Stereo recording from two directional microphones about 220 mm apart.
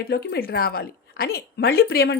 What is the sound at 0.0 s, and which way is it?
Speech, 50° left (ahead or behind).